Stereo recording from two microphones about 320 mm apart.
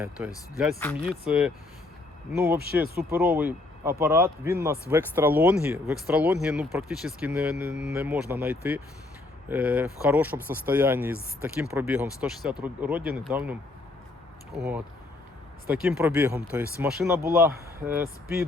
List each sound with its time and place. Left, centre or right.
0.2 s speech: centre
2.8 s speech: right
3.1 s speech: centre
14.6 s speech: centre